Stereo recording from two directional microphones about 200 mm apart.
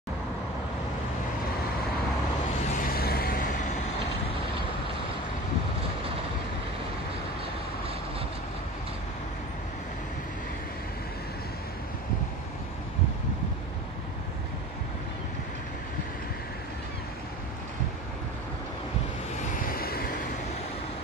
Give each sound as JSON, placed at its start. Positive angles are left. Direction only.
{"t": 2.7, "sound": "vehicle", "side_deg": 45}
{"t": 19.5, "sound": "vehicle", "side_deg": 45}